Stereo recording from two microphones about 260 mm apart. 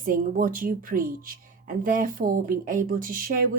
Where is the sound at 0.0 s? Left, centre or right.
Right.